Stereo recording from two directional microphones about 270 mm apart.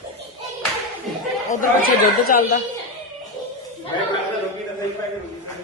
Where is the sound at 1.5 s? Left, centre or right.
Left.